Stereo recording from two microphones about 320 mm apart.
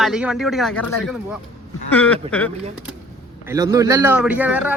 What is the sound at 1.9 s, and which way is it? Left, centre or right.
Speech, centre.